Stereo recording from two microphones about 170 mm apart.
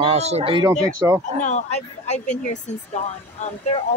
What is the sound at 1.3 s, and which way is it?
Speech, 45° left (ahead or behind).